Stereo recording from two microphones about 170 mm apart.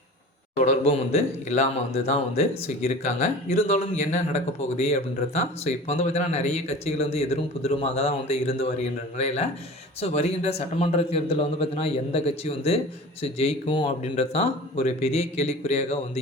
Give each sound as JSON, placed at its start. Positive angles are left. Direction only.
{"t": 0.6, "sound": "speech", "side_deg": 40}